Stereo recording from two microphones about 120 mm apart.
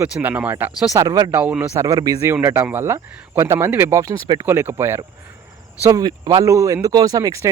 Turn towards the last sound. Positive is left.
turn(degrees=-25)  # may be behind; listen again after turning